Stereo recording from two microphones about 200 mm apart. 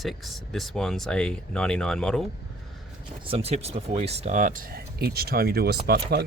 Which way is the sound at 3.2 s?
30° right (ahead or behind).